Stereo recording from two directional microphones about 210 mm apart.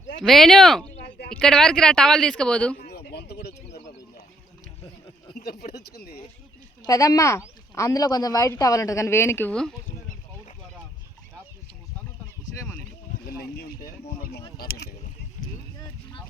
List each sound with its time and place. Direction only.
0.2 s speech: centre (ahead or behind)
2.8 s a sound: 50° left (ahead or behind)
5.4 s speech: 45° left (ahead or behind)
6.8 s speech: 15° left (ahead or behind)
13.2 s speech: 45° left (ahead or behind)
14.0 s a sound: 40° left (ahead or behind)